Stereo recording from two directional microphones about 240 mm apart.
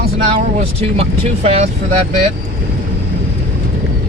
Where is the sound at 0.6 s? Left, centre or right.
Right.